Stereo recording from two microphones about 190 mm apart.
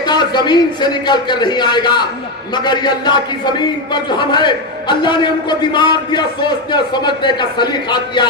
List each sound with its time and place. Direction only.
0.0 s a man's voice: 20° left (ahead or behind)